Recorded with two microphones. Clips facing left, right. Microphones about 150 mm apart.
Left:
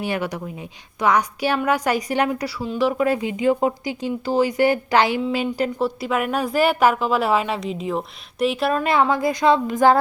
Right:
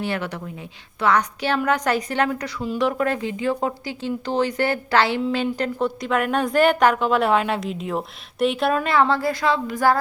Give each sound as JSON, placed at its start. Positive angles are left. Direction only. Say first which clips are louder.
{"t": 0.0, "sound": "speech", "louder": "left 2 dB", "side_deg": 10}
{"t": 2.6, "sound": "a woman's voice", "louder": "left 2 dB", "side_deg": 0}
{"t": 8.9, "sound": "a woman's voice", "louder": "left 1 dB", "side_deg": 15}